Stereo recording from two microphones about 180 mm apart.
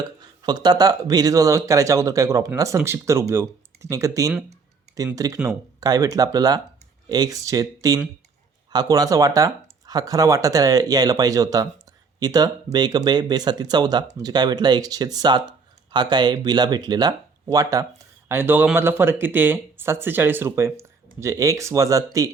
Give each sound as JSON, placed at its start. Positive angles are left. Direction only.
{"t": 0.0, "sound": "speech", "side_deg": -25}